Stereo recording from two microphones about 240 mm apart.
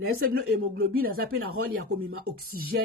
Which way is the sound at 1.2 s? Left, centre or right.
Right.